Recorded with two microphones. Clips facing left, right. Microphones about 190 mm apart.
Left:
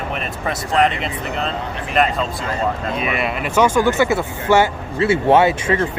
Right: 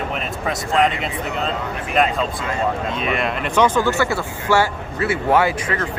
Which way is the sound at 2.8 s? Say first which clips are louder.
Even; 5° left (ahead or behind).